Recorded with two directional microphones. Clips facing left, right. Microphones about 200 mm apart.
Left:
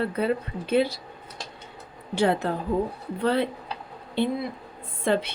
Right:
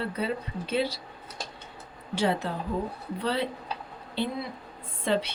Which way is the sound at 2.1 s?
55° left (ahead or behind).